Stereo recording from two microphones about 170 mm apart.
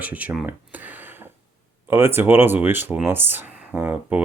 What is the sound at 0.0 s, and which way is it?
Speech, 10° right (ahead or behind).